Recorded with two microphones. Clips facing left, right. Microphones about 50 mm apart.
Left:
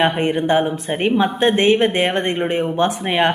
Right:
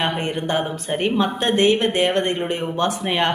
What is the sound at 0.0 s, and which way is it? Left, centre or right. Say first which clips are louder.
A woman's voice: left 6 dB; centre.